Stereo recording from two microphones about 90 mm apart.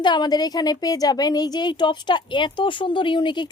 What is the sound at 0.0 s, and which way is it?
A woman's voice, 55° left (ahead or behind).